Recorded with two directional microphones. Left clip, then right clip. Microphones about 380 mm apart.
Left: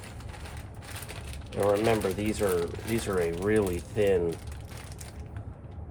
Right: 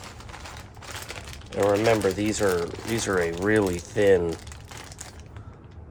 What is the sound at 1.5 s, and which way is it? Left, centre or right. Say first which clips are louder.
Speech: right 4 dB; right.